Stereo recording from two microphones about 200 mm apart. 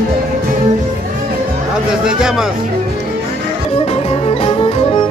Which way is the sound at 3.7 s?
30° left (ahead or behind).